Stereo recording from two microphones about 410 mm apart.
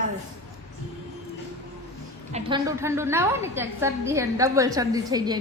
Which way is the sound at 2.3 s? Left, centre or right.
Centre.